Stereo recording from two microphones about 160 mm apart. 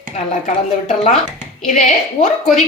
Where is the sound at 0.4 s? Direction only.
45° left (ahead or behind).